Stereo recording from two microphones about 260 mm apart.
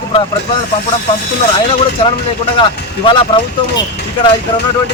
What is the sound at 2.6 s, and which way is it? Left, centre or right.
Speech, centre.